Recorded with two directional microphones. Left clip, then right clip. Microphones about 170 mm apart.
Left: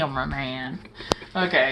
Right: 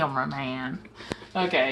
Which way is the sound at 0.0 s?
Centre (ahead or behind).